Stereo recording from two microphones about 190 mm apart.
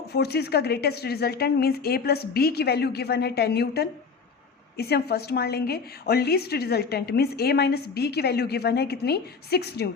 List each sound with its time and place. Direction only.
0.1 s a woman's voice: 60° left (ahead or behind)